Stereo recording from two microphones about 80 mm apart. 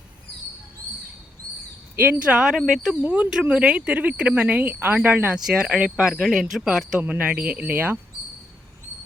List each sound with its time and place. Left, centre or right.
2.0 s speech: centre
2.4 s speech: centre
3.0 s speech: centre
5.5 s speech: centre
7.1 s speech: centre